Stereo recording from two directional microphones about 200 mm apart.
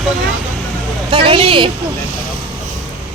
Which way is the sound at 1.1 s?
25° right (ahead or behind).